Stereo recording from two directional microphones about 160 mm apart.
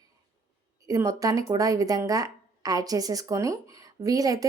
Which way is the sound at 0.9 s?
20° right (ahead or behind).